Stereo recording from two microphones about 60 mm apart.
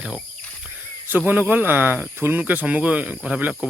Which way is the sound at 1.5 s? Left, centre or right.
Right.